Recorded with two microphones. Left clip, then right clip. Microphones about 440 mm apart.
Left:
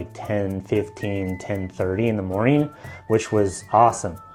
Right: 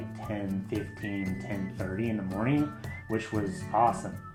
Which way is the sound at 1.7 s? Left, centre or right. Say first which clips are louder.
Left 13 dB; left.